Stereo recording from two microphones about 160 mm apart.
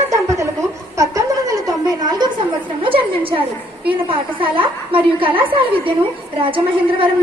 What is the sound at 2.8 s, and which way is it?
A woman's voice, 35° right (ahead or behind).